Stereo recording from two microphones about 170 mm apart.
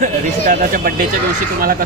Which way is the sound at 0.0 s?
50° right (ahead or behind).